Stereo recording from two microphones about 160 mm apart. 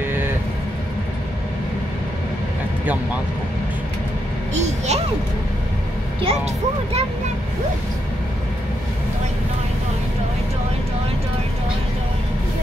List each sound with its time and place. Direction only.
4.6 s a child's voice: 45° right (ahead or behind)
6.2 s speech: 40° right (ahead or behind)